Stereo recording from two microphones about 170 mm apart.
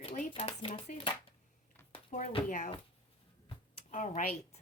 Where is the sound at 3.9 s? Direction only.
45° left (ahead or behind).